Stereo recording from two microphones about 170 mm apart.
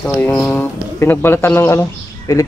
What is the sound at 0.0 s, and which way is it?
Speech, 5° left (ahead or behind).